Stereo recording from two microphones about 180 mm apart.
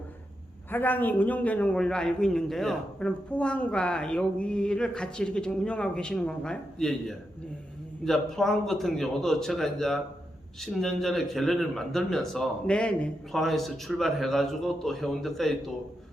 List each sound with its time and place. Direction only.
0.7 s a man's voice: 10° left (ahead or behind)